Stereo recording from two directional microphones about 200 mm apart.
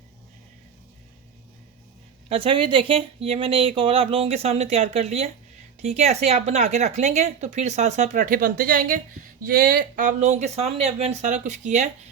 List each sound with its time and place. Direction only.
2.3 s a woman's voice: 25° right (ahead or behind)